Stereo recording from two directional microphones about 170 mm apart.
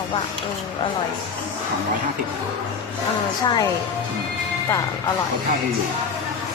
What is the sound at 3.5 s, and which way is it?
Speech, 20° left (ahead or behind).